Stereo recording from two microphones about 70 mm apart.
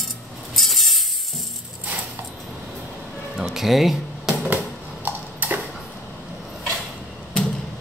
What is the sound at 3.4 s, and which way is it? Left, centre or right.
Music, centre.